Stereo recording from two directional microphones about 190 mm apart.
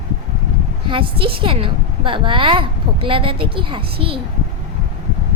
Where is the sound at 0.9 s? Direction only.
25° right (ahead or behind).